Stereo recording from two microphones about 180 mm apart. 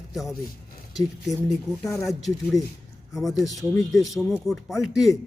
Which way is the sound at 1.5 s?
Centre (ahead or behind).